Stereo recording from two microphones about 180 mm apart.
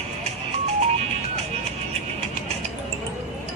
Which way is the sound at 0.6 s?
35° right (ahead or behind).